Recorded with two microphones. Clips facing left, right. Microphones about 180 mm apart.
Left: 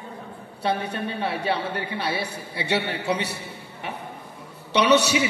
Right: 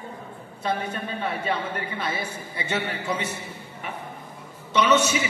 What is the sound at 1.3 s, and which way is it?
A man's voice, 75° left (ahead or behind).